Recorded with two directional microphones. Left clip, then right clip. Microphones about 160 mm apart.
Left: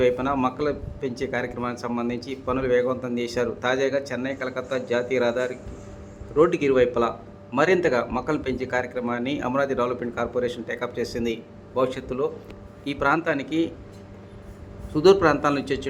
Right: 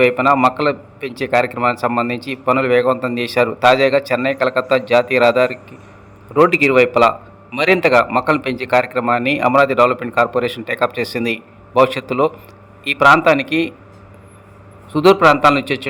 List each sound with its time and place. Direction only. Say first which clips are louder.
0.0 s a man's voice: right 10 dB; 30° right (ahead or behind)
14.9 s a man's voice: right 7 dB; 25° right (ahead or behind)